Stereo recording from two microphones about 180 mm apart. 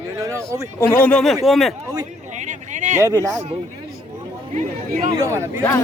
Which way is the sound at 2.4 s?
45° right (ahead or behind).